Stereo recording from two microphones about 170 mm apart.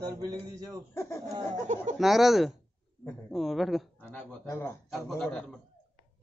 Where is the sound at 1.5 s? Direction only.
45° right (ahead or behind).